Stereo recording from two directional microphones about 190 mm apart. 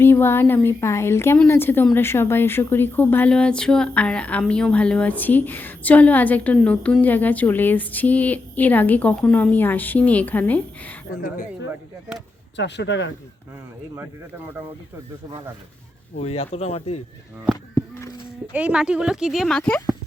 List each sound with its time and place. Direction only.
0.0 s a woman's voice: 10° left (ahead or behind)
12.5 s speech: 65° left (ahead or behind)
13.9 s speech: 10° right (ahead or behind)
16.1 s speech: 30° left (ahead or behind)
17.4 s speech: 10° left (ahead or behind)
18.5 s speech: 5° right (ahead or behind)